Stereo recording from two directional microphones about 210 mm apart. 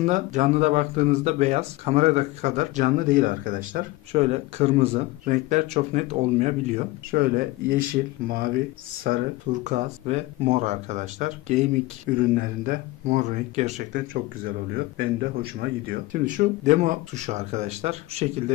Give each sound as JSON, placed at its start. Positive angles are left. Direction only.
{"t": 0.0, "sound": "speech", "side_deg": -35}
{"t": 4.1, "sound": "speech", "side_deg": -30}